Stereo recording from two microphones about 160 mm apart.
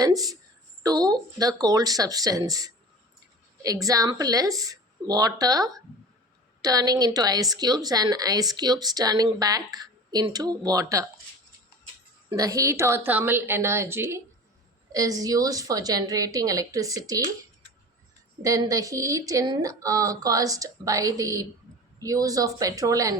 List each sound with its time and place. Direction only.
0.0 s a woman's voice: 20° right (ahead or behind)
12.3 s a woman's voice: 20° right (ahead or behind)
18.4 s a woman's voice: 20° right (ahead or behind)